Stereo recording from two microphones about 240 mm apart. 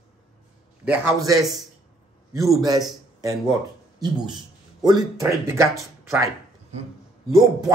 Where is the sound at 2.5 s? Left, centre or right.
Centre.